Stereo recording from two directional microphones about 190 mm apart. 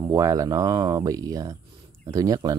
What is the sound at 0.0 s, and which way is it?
Speech, 20° right (ahead or behind).